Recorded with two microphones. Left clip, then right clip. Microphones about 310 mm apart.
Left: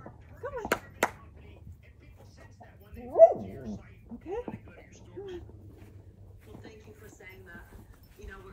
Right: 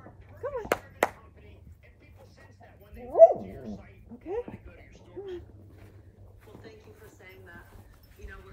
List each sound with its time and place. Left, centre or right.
0.4 s chop: right
3.1 s dog: right
6.4 s a sound: centre